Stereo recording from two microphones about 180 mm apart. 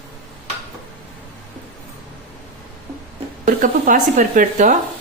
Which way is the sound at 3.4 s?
50° right (ahead or behind).